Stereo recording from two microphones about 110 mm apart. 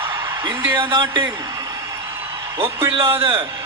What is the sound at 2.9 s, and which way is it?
Speech, 55° right (ahead or behind).